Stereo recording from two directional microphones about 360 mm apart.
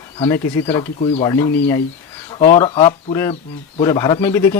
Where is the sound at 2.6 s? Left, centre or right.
Centre.